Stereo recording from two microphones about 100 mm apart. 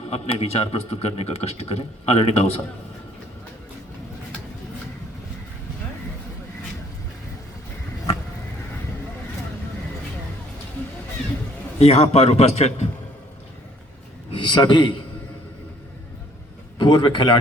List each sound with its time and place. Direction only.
0.1 s speech: 90° left
11.8 s speech: 90° left
14.3 s a man's voice: 50° left (ahead or behind)
16.7 s a man's voice: 50° left (ahead or behind)